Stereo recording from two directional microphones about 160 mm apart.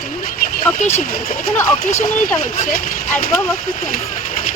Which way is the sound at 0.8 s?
45° left (ahead or behind).